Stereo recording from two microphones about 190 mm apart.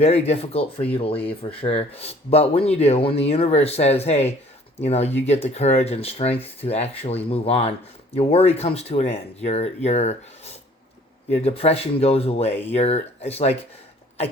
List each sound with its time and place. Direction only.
0.0 s speech: 35° left (ahead or behind)